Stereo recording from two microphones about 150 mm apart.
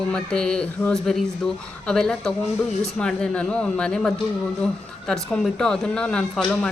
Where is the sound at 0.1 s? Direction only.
5° left (ahead or behind).